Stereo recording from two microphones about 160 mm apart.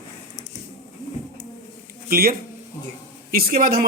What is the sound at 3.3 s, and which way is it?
Speech, 65° right (ahead or behind).